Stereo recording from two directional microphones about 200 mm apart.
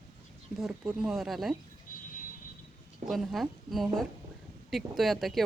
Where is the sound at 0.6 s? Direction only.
5° right (ahead or behind).